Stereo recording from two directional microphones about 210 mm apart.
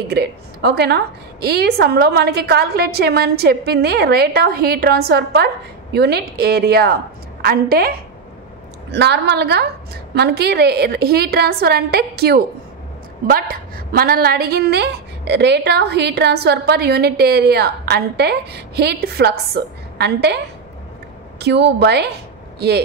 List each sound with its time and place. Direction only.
0.1 s a woman's voice: 50° right (ahead or behind)
8.9 s a woman's voice: 55° right (ahead or behind)
21.4 s a woman's voice: 55° right (ahead or behind)